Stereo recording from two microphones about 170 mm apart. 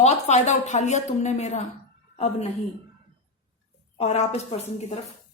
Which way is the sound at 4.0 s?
40° left (ahead or behind).